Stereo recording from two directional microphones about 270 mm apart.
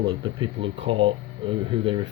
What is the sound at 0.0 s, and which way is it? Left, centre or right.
Speech, centre.